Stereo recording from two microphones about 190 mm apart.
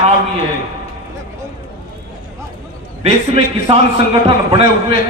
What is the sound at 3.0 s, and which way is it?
A man's voice, 35° right (ahead or behind).